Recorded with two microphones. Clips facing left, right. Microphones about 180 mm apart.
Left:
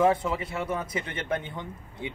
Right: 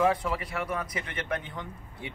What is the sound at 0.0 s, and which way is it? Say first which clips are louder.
Speech: left 3 dB; 25° left (ahead or behind).